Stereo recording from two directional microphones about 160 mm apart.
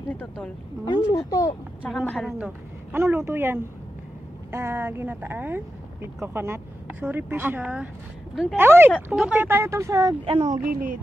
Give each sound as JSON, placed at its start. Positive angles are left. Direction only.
{"t": 0.1, "sound": "speech", "side_deg": 10}
{"t": 1.0, "sound": "speech", "side_deg": 20}
{"t": 1.9, "sound": "a woman's voice", "side_deg": 0}
{"t": 2.3, "sound": "a woman's voice", "side_deg": -10}
{"t": 8.9, "sound": "speech", "side_deg": 0}
{"t": 10.2, "sound": "speech", "side_deg": -45}